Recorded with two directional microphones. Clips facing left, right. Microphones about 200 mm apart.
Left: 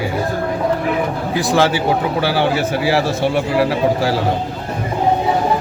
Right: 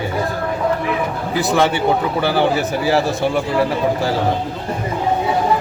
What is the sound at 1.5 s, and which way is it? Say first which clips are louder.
Speech: left 1 dB; centre (ahead or behind).